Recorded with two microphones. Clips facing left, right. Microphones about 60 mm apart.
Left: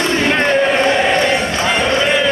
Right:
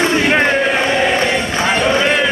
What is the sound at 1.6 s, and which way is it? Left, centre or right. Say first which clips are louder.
Run: right 1 dB; centre.